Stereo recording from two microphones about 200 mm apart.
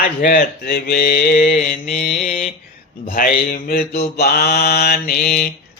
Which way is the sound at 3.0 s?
45° left (ahead or behind).